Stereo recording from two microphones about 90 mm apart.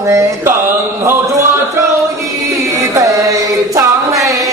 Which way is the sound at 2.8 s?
40° right (ahead or behind).